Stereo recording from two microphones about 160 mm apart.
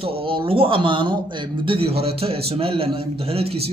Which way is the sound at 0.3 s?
35° right (ahead or behind).